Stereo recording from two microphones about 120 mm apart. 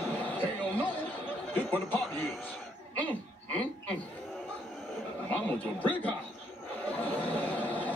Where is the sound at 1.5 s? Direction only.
15° left (ahead or behind).